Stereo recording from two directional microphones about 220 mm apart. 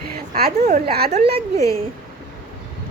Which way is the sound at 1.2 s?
45° right (ahead or behind).